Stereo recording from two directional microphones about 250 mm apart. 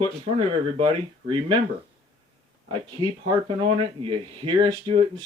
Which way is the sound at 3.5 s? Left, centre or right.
Right.